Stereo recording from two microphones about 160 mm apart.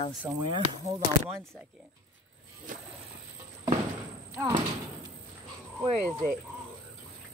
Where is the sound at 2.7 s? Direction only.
55° right (ahead or behind).